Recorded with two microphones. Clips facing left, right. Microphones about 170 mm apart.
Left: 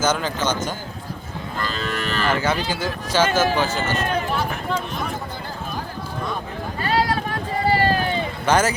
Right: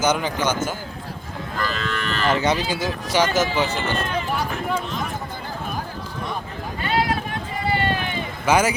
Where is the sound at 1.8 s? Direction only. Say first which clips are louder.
Left 1 dB; 40° left (ahead or behind).